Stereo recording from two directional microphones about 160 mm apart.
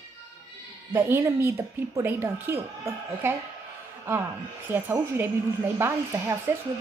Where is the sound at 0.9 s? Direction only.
15° right (ahead or behind).